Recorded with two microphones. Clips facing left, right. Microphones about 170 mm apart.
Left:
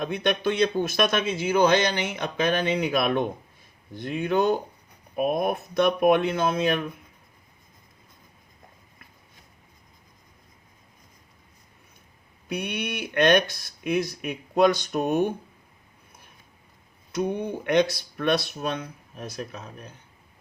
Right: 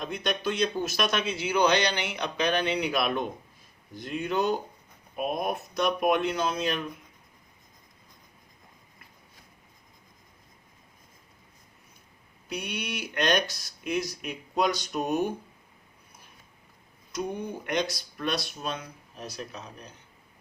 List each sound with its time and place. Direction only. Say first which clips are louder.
0.0 s a man's voice: left 5 dB; 60° left (ahead or behind)
12.5 s speech: left 4 dB; 55° left (ahead or behind)
17.7 s speech: left 9 dB; 60° left (ahead or behind)